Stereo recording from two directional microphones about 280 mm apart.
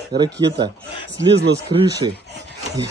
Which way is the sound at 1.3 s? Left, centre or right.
Right.